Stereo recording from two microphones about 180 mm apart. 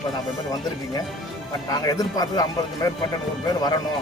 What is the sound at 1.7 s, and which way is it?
A man's voice, 20° left (ahead or behind).